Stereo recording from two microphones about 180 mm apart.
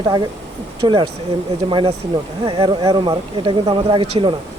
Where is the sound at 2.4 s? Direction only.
30° right (ahead or behind).